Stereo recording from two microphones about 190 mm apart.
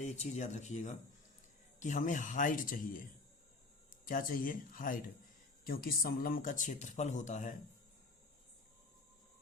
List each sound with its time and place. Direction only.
0.0 s speech: 35° left (ahead or behind)
4.0 s speech: 45° left (ahead or behind)